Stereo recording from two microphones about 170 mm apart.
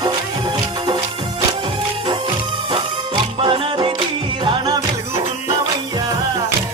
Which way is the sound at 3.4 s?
30° right (ahead or behind).